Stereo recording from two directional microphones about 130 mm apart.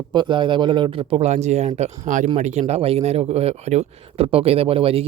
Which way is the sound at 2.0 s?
75° right (ahead or behind).